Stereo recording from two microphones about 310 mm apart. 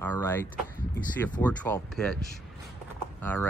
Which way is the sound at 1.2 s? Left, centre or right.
Centre.